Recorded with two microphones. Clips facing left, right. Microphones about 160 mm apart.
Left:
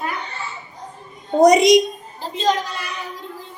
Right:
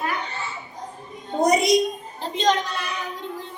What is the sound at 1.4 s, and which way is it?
Speech, 90° left.